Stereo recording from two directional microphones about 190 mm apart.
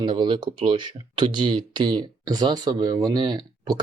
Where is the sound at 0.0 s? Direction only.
25° right (ahead or behind).